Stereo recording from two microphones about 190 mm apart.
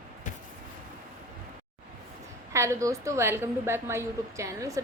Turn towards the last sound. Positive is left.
turn(degrees=-15)  # may be behind; listen again after turning